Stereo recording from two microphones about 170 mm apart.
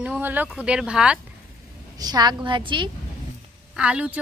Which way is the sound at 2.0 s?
25° right (ahead or behind).